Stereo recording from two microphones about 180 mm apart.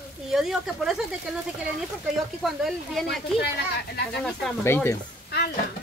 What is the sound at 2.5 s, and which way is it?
Speech, centre (ahead or behind).